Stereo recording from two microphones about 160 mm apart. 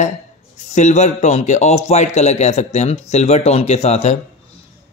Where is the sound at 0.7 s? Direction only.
45° left (ahead or behind).